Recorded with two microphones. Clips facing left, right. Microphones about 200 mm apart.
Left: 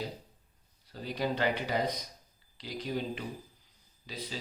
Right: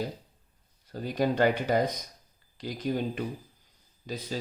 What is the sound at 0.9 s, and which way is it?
Speech, 50° right (ahead or behind).